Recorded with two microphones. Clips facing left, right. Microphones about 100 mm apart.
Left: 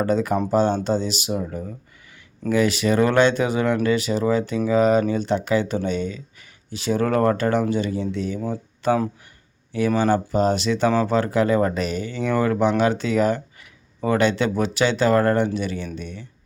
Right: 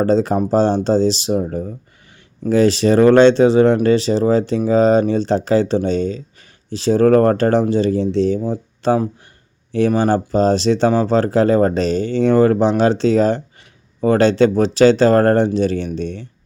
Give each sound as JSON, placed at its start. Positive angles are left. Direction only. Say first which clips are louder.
{"t": 0.0, "sound": "speech", "louder": "right 5 dB", "side_deg": -30}
{"t": 15.4, "sound": "speech", "louder": "right 8 dB", "side_deg": -35}